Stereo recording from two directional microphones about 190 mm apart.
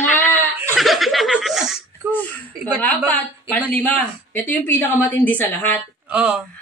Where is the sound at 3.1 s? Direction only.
10° left (ahead or behind).